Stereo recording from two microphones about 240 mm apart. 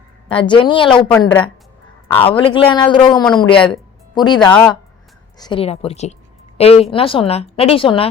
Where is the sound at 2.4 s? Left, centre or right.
Left.